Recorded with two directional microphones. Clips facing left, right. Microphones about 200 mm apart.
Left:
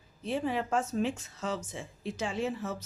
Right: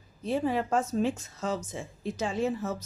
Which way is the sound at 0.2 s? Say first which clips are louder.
Right 3 dB; 40° right (ahead or behind).